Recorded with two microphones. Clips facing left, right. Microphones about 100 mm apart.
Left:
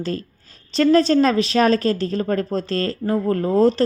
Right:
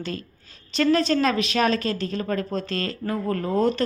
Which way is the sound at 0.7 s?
35° left (ahead or behind).